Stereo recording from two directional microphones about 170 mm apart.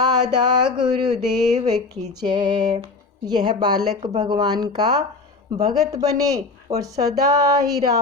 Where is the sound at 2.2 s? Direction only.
25° right (ahead or behind).